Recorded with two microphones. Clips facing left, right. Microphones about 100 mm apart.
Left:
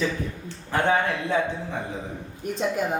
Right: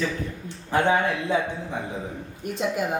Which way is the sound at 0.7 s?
15° right (ahead or behind).